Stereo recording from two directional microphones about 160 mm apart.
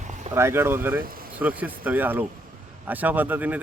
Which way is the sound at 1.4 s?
10° right (ahead or behind).